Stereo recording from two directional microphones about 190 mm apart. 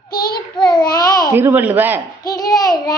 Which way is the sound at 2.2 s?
20° left (ahead or behind).